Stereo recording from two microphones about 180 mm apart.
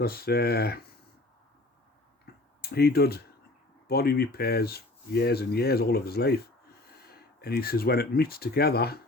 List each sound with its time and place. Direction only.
0.0 s speech: 60° left (ahead or behind)
2.2 s a sound: 60° left (ahead or behind)
3.8 s speech: 60° left (ahead or behind)